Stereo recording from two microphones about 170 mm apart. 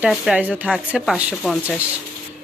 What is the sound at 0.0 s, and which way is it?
Speech, 5° right (ahead or behind).